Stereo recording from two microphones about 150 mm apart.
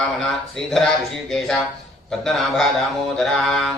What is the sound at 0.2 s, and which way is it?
Speech, 5° left (ahead or behind).